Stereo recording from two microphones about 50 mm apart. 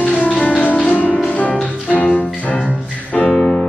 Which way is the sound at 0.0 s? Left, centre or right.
Left.